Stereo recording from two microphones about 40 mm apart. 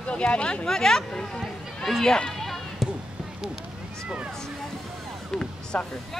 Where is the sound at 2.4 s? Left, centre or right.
Centre.